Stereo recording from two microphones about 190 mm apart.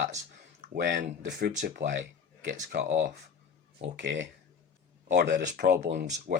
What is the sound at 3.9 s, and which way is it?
Speech, 70° right (ahead or behind).